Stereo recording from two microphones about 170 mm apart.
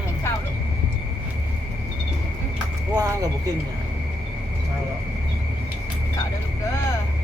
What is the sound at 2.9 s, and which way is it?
Speech, 15° right (ahead or behind).